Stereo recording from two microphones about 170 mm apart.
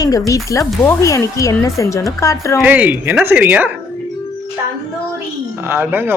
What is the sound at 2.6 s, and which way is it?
A man's voice, 10° right (ahead or behind).